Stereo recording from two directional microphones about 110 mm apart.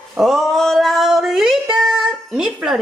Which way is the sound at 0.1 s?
Centre (ahead or behind).